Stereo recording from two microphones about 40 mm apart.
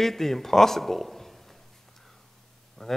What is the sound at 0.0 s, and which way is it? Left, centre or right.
Speech, centre.